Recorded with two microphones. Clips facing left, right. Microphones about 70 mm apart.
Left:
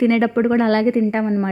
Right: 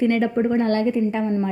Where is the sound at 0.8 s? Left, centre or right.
Left.